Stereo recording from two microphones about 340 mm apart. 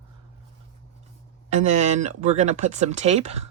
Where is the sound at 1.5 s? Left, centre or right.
Right.